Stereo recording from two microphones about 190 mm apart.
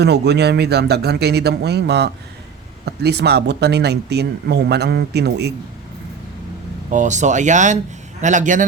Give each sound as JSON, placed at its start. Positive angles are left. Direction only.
{"t": 0.0, "sound": "speech", "side_deg": -60}
{"t": 6.9, "sound": "speech", "side_deg": -40}